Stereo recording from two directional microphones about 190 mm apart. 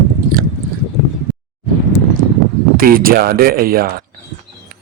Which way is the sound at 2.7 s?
50° right (ahead or behind).